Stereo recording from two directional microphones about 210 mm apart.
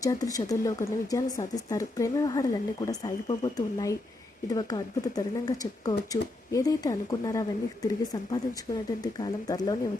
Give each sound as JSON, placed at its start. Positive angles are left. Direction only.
{"t": 0.0, "sound": "speech", "side_deg": 15}